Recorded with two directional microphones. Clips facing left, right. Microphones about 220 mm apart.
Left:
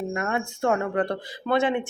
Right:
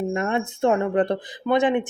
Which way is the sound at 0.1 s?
25° right (ahead or behind).